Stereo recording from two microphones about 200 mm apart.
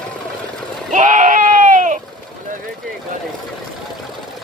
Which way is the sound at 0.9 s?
40° right (ahead or behind).